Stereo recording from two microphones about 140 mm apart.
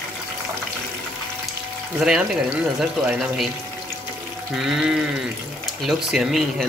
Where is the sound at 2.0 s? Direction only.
5° right (ahead or behind).